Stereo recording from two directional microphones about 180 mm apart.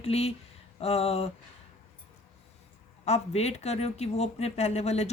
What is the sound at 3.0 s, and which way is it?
Speech, 35° left (ahead or behind).